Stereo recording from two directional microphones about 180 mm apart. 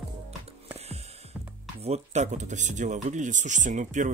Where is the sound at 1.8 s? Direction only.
35° right (ahead or behind).